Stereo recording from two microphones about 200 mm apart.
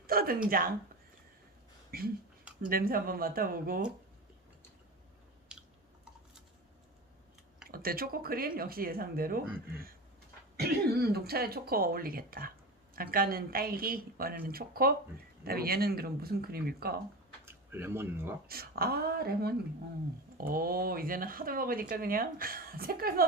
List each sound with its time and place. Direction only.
0.1 s a sound: 50° right (ahead or behind)
0.5 s speech: 45° right (ahead or behind)
1.9 s speech: 50° right (ahead or behind)
7.6 s speech: 50° right (ahead or behind)
10.6 s speech: 50° right (ahead or behind)
17.4 s speech: 10° right (ahead or behind)
18.4 s speech: 50° right (ahead or behind)